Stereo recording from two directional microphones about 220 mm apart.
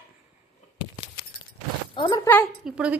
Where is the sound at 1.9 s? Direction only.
20° left (ahead or behind).